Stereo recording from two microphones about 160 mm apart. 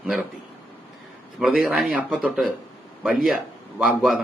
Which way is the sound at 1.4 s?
Centre (ahead or behind).